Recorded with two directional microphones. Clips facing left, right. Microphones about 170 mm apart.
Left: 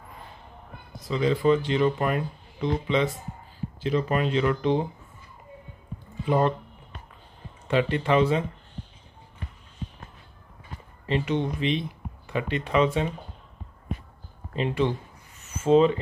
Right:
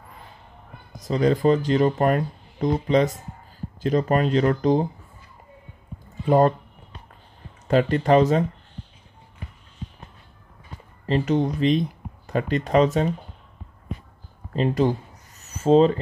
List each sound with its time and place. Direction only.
0.9 s speech: 45° right (ahead or behind)
6.2 s speech: 40° right (ahead or behind)
7.6 s speech: 40° right (ahead or behind)
11.1 s speech: 40° right (ahead or behind)
14.5 s a sound: 40° right (ahead or behind)